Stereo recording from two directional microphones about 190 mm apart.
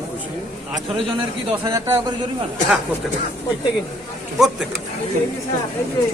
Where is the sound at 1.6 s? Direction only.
20° right (ahead or behind).